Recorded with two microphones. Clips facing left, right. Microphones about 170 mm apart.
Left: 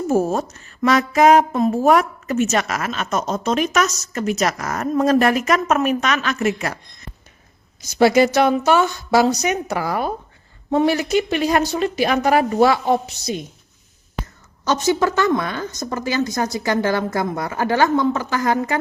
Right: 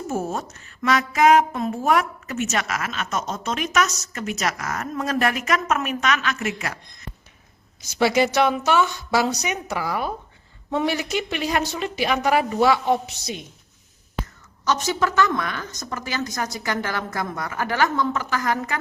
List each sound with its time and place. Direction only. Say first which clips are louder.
0.1 s speech: left 8 dB; 35° left (ahead or behind)
7.8 s a woman's voice: left 5 dB; 45° left (ahead or behind)
14.2 s a sound: left 1 dB; centre (ahead or behind)
14.6 s a woman's voice: left 5 dB; 30° left (ahead or behind)